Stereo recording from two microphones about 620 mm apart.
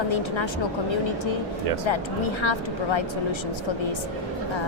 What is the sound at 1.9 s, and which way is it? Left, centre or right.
A woman's voice, left.